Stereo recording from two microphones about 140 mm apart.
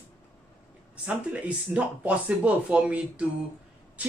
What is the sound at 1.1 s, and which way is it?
Speech, 10° right (ahead or behind).